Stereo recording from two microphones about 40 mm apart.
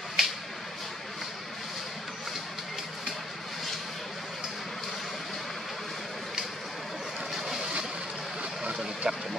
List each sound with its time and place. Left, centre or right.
0.2 s a sound: centre
7.3 s vehicle: centre
9.0 s speech: centre